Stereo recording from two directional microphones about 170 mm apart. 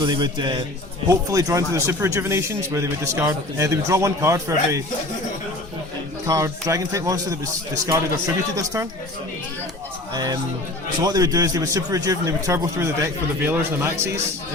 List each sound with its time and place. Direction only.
0.0 s a man's voice: 25° right (ahead or behind)
6.2 s a man's voice: 20° right (ahead or behind)
10.2 s a man's voice: 25° right (ahead or behind)